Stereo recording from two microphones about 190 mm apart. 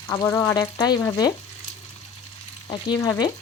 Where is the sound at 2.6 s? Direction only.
25° left (ahead or behind).